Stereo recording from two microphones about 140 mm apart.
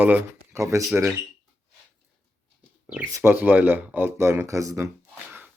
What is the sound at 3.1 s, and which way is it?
Speech, 15° right (ahead or behind).